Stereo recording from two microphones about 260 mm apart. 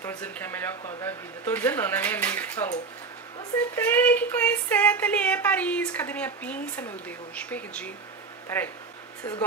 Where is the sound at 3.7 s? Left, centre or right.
Centre.